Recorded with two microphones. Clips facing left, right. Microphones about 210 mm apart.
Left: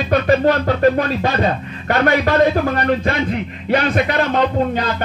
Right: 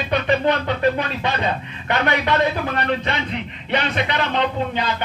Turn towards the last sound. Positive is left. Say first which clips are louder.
# left 5 dB
turn(degrees=45)  # may be behind; listen again after turning